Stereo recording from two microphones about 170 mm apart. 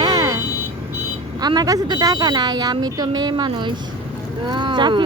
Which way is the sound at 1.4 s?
25° right (ahead or behind).